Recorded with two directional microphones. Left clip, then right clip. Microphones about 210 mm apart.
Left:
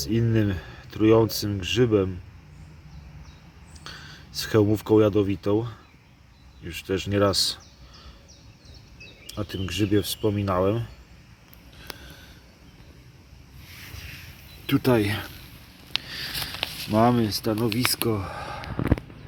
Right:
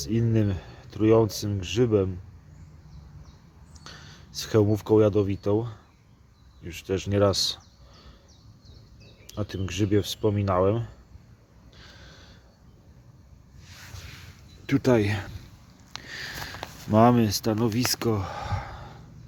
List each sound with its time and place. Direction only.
0.0 s speech: centre (ahead or behind)
3.8 s speech: centre (ahead or behind)
9.2 s speech: 5° right (ahead or behind)
13.9 s a sound: 50° right (ahead or behind)
14.7 s speech: 5° right (ahead or behind)
16.0 s a sound: 15° right (ahead or behind)
18.1 s speech: 10° right (ahead or behind)